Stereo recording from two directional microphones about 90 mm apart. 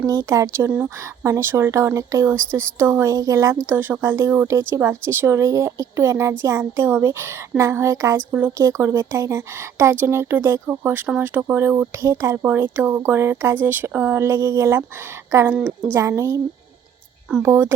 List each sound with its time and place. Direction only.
0.0 s speech: 40° right (ahead or behind)
15.9 s speech: 30° right (ahead or behind)
17.4 s speech: 30° right (ahead or behind)